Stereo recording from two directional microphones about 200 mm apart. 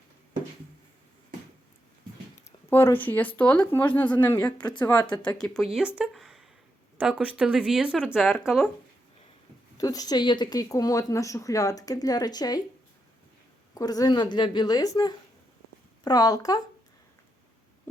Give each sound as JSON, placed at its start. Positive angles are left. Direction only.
{"t": 2.6, "sound": "speech", "side_deg": 10}
{"t": 5.7, "sound": "speech", "side_deg": -5}
{"t": 9.7, "sound": "speech", "side_deg": 20}
{"t": 13.7, "sound": "speech", "side_deg": 20}